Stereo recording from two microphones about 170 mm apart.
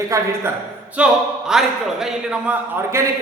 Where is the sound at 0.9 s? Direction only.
5° right (ahead or behind).